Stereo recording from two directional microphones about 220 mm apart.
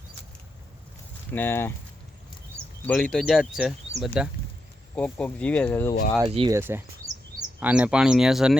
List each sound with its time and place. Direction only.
1.3 s speech: 10° left (ahead or behind)
2.8 s speech: 5° left (ahead or behind)
6.2 s speech: 20° right (ahead or behind)
6.6 s speech: 10° right (ahead or behind)